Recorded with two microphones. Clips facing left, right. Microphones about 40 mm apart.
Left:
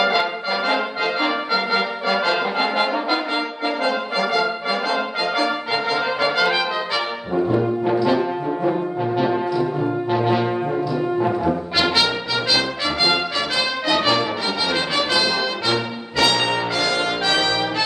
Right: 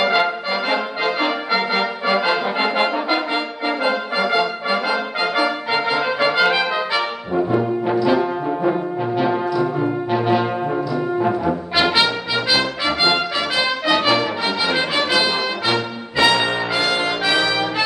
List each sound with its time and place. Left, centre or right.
0.0 s brass instrument: centre
11.7 s brass instrument: centre
14.7 s music: centre